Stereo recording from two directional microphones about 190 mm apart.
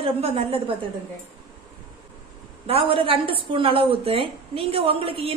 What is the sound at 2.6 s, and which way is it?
A woman's voice, 30° right (ahead or behind).